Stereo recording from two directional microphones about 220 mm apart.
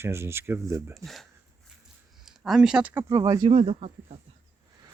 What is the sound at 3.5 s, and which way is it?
Speech, 30° right (ahead or behind).